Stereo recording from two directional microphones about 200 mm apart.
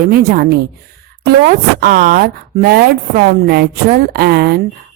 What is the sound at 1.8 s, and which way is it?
A woman's voice, 50° right (ahead or behind).